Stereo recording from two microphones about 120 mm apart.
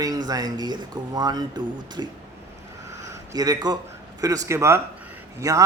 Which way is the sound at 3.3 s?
35° right (ahead or behind).